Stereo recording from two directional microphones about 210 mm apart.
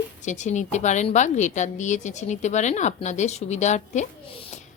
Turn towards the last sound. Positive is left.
turn(degrees=35)  # may be behind; listen again after turning